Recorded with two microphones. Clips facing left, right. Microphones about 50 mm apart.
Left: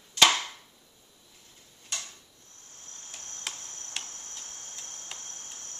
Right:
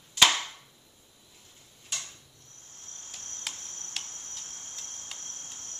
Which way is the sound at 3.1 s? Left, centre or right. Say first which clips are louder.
Left 1 dB; centre.